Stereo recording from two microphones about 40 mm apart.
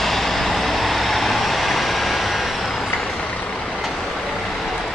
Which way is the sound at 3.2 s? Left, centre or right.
Left.